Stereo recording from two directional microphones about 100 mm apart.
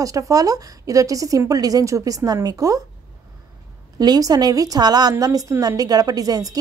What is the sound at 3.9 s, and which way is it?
A woman's voice, 40° right (ahead or behind).